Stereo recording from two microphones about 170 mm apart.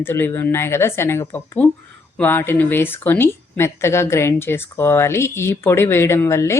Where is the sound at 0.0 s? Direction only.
10° left (ahead or behind).